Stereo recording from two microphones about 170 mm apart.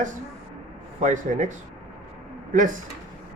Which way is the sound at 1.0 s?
45° right (ahead or behind).